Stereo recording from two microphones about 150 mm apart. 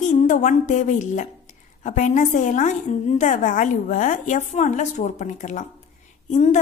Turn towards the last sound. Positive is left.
turn(degrees=50)  # may be behind; listen again after turning